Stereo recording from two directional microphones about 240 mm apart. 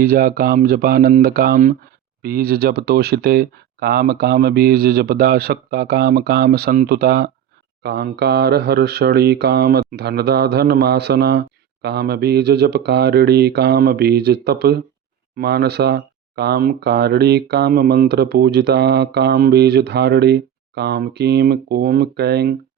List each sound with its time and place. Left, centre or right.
0.0 s mantra: right
15.4 s speech: right